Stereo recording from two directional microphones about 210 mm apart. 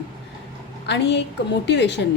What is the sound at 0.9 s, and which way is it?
A woman's voice, 55° left (ahead or behind).